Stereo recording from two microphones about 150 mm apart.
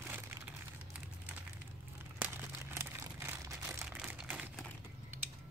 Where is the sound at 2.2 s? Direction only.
15° right (ahead or behind).